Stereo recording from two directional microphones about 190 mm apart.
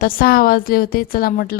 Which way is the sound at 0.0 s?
50° left (ahead or behind).